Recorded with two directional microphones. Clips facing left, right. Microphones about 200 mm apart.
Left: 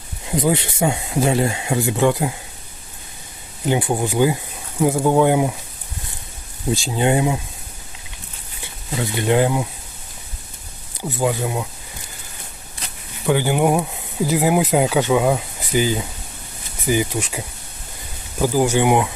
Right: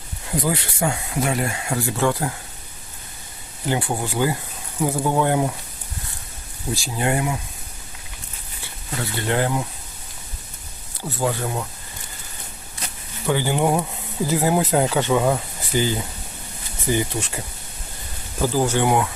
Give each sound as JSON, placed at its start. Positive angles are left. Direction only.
{"t": 0.3, "sound": "speech", "side_deg": 20}
{"t": 3.7, "sound": "speech", "side_deg": 15}
{"t": 6.7, "sound": "speech", "side_deg": 25}
{"t": 8.6, "sound": "speech", "side_deg": 15}
{"t": 10.9, "sound": "speech", "side_deg": 15}
{"t": 13.2, "sound": "speech", "side_deg": 15}